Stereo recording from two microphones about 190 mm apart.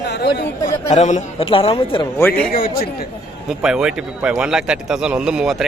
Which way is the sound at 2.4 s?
50° left (ahead or behind).